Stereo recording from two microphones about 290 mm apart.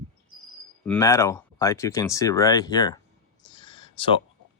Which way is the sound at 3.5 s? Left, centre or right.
Centre.